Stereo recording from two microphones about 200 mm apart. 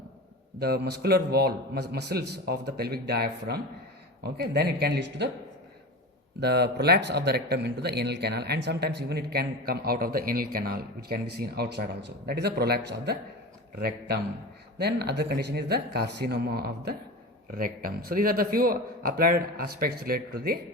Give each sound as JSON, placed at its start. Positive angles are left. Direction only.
{"t": 0.6, "sound": "speech", "side_deg": -50}
{"t": 6.4, "sound": "speech", "side_deg": -55}